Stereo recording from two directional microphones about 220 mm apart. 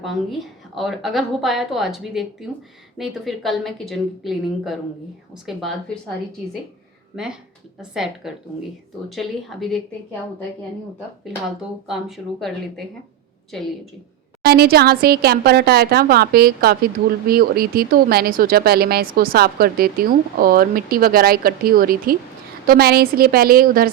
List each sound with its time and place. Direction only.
0.0 s a woman's voice: centre (ahead or behind)
7.8 s a woman's voice: centre (ahead or behind)
11.3 s a woman's voice: 5° right (ahead or behind)
14.4 s speech: 45° right (ahead or behind)